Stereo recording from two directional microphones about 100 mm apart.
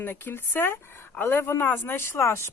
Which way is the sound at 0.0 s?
20° left (ahead or behind).